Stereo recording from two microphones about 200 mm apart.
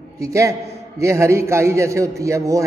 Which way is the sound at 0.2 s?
15° right (ahead or behind).